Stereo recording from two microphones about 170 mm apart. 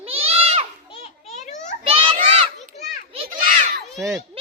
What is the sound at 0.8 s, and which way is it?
Children playing, 35° left (ahead or behind).